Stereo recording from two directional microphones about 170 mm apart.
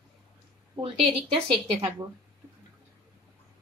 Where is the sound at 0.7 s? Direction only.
30° right (ahead or behind).